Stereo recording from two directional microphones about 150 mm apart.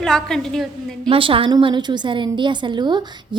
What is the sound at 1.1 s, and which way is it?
A woman's voice, 35° right (ahead or behind).